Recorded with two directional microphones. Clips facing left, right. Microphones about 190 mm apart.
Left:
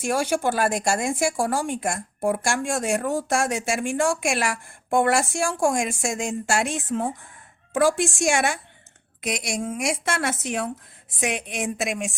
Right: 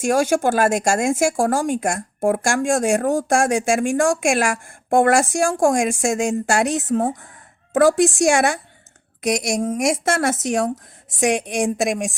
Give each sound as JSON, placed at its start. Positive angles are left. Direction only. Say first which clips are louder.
{"t": 0.0, "sound": "a woman's voice", "louder": "right 5 dB", "side_deg": -45}